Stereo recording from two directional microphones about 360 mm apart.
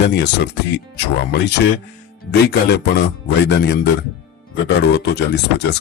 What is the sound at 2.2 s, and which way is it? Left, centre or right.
Speech, left.